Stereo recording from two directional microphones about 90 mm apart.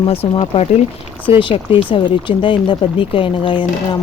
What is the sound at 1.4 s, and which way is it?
Speech, 70° left (ahead or behind).